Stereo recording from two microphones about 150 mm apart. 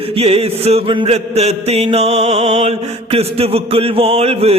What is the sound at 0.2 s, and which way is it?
Mantra, 40° right (ahead or behind).